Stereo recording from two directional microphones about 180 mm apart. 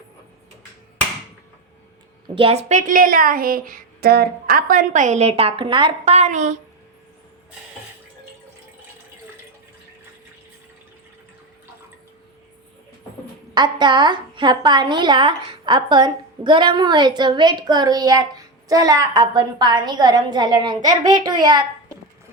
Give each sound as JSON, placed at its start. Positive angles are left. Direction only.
{"t": 2.2, "sound": "a woman's voice", "side_deg": -30}
{"t": 13.5, "sound": "a woman's voice", "side_deg": -25}